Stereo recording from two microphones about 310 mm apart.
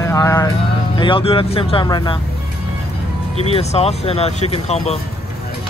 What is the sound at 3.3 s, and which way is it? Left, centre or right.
Speech, centre.